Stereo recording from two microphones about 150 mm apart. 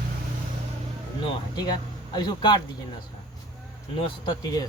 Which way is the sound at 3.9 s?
30° left (ahead or behind).